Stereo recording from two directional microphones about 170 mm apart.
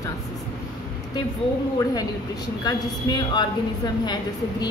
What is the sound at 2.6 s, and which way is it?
Speech, 25° left (ahead or behind).